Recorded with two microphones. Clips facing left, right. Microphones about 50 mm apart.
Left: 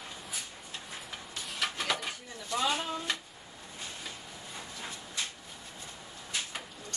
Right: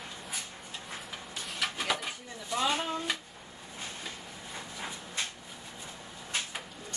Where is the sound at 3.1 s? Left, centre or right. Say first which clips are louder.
Even; centre.